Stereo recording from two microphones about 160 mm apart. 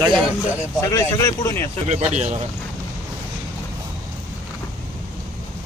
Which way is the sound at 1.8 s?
45° right (ahead or behind).